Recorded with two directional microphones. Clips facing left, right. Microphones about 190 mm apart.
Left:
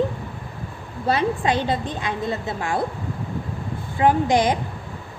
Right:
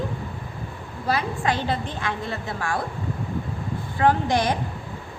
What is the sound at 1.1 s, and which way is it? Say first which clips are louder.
A woman's voice: left 4 dB; 20° left (ahead or behind).